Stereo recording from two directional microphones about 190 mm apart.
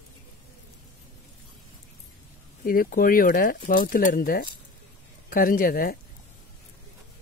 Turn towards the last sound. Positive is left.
turn(degrees=50)  # may be behind; listen again after turning